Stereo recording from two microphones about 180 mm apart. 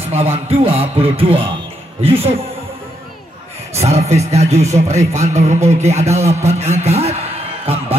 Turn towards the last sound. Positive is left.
turn(degrees=-35)  # may be behind; listen again after turning